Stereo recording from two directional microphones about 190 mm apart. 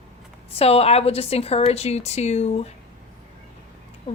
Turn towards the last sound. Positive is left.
turn(degrees=25)  # may be behind; listen again after turning